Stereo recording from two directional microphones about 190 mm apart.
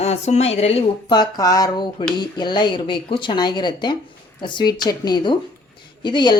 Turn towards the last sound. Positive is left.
turn(degrees=25)  # may be behind; listen again after turning